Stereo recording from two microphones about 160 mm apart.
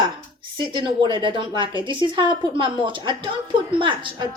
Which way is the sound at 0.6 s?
30° right (ahead or behind).